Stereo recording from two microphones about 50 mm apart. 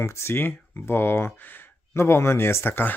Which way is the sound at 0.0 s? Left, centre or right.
Left.